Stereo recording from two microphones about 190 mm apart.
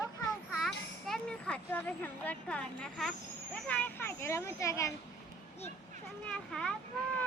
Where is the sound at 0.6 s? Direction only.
Centre (ahead or behind).